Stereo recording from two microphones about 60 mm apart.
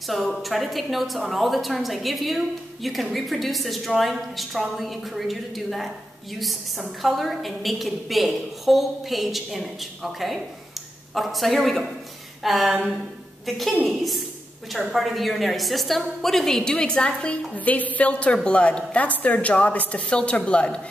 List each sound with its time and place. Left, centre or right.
0.1 s a woman's voice: centre
7.0 s a woman's voice: centre
14.8 s a woman's voice: centre
16.7 s a woman's voice: centre